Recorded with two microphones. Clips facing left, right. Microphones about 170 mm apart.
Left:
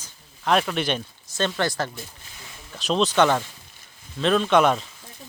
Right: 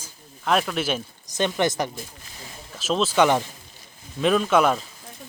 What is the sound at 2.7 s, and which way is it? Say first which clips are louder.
Speech: even; centre (ahead or behind).